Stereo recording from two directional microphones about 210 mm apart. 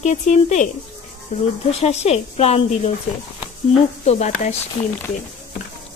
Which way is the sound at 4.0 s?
35° left (ahead or behind).